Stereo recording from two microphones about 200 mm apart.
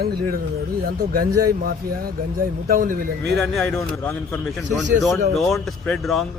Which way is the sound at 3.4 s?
Centre (ahead or behind).